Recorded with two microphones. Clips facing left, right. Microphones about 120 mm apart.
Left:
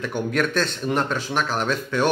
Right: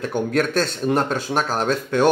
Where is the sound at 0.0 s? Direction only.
40° right (ahead or behind).